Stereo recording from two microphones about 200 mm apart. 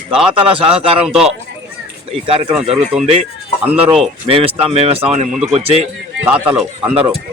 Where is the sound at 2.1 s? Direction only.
30° right (ahead or behind).